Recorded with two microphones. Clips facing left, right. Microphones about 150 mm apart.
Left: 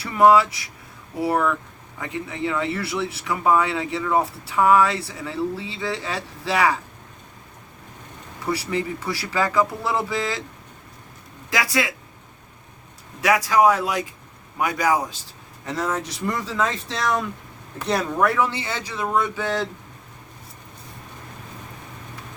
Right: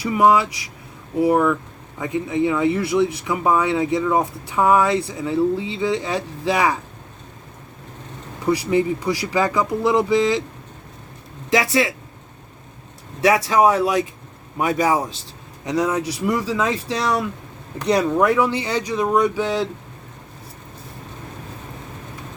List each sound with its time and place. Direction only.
0.0 s speech: 15° right (ahead or behind)
8.4 s speech: 15° right (ahead or behind)
11.5 s speech: 25° right (ahead or behind)
13.2 s speech: 20° right (ahead or behind)
15.6 s speech: 15° right (ahead or behind)